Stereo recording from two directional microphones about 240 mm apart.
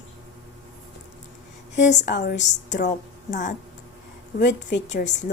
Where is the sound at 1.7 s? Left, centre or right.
Left.